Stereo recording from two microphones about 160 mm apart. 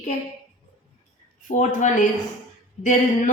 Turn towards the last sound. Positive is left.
turn(degrees=50)  # may be behind; listen again after turning